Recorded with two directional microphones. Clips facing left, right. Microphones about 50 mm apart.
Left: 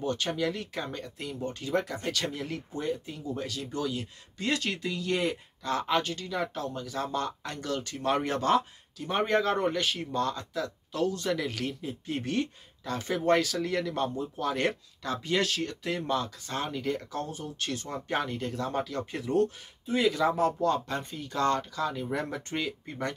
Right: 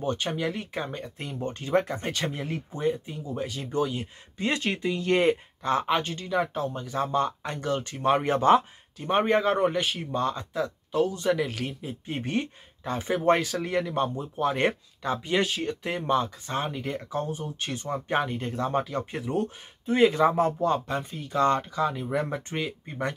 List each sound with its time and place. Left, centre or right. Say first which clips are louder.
0.0 s speech: right 1 dB; right
1.2 s speech: right 1 dB; right
5.0 s speech: right 7 dB; right
19.9 s speech: right 5 dB; right
21.0 s speech: right 1 dB; centre
21.3 s speech: right 4 dB; right